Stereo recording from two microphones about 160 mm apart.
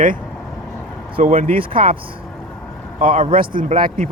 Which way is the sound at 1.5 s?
35° right (ahead or behind).